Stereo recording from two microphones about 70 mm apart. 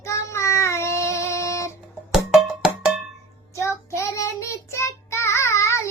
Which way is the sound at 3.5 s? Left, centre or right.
Left.